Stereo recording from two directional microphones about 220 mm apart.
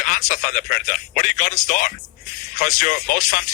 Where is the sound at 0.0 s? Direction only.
35° left (ahead or behind).